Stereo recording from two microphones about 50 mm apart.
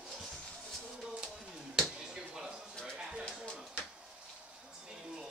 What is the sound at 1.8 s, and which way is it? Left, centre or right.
Finger snapping, centre.